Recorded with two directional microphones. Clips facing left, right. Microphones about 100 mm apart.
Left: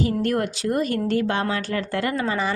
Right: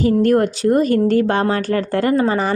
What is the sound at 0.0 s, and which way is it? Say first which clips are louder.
Speech: right 8 dB; 40° right (ahead or behind).